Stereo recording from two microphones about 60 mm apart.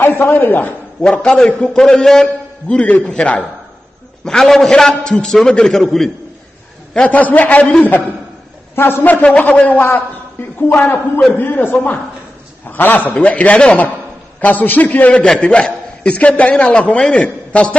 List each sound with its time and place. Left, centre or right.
0.0 s a man's voice: left
1.1 s a man's voice: centre
2.7 s a man's voice: left; by 6.1 s centre
6.9 s a man's voice: left
8.7 s a man's voice: left
9.2 s a man's voice: left